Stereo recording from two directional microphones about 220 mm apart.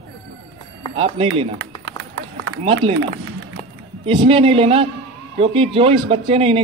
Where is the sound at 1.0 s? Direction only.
25° right (ahead or behind).